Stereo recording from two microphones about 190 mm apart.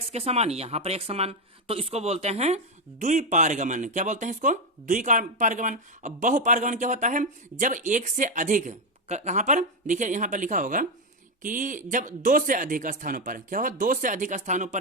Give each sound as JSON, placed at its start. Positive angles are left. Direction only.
{"t": 0.1, "sound": "speech", "side_deg": -35}